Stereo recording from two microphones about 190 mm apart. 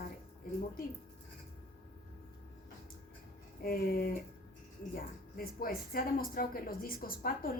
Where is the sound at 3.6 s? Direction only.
50° left (ahead or behind).